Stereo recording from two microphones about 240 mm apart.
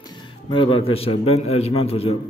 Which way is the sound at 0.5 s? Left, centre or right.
Left.